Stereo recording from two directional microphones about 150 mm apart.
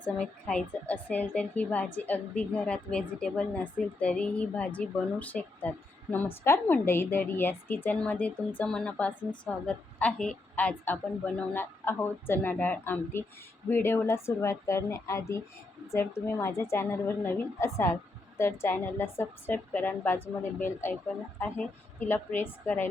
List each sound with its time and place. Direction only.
0.0 s a woman's voice: 5° left (ahead or behind)